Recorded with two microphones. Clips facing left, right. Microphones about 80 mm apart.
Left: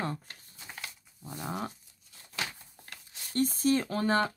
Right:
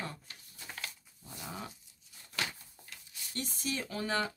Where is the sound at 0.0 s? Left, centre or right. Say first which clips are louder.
Left 7 dB; left.